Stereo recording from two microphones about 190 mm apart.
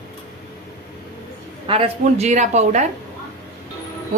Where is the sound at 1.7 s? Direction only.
30° right (ahead or behind).